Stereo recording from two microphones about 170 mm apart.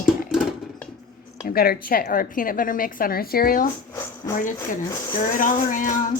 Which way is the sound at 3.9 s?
15° left (ahead or behind).